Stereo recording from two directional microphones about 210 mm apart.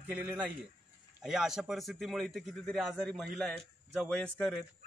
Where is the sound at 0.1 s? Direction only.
5° right (ahead or behind).